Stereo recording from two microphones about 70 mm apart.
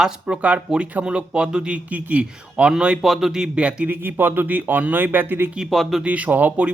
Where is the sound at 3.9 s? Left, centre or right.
Right.